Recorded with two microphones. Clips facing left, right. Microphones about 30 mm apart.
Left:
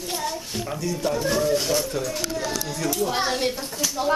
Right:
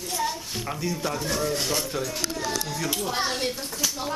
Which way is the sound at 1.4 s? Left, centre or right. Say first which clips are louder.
Left 4 dB; centre.